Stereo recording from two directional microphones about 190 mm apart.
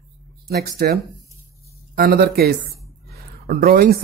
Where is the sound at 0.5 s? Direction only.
60° right (ahead or behind).